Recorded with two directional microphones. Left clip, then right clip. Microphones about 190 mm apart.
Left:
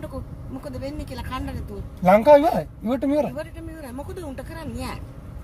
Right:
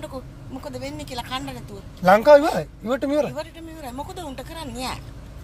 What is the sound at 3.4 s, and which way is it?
A woman's voice, 25° left (ahead or behind).